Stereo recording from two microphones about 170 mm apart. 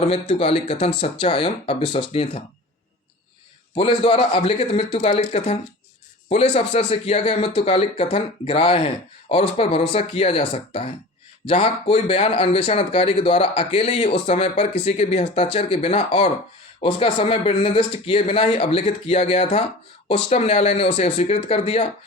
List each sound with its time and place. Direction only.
0.1 s speech: 35° left (ahead or behind)
3.8 s speech: 35° left (ahead or behind)
4.9 s speech: 45° left (ahead or behind)